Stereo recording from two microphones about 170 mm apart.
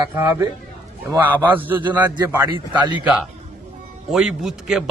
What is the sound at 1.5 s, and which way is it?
Speech, 10° right (ahead or behind).